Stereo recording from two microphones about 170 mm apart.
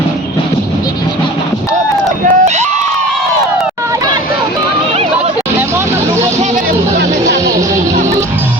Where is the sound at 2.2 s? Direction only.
40° right (ahead or behind).